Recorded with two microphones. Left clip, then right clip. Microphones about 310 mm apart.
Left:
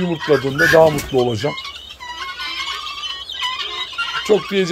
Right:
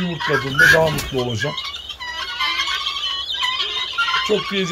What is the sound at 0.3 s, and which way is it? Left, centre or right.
Speech, centre.